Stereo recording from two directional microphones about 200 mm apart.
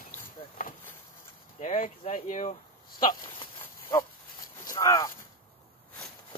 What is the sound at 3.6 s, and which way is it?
Dog, 15° left (ahead or behind).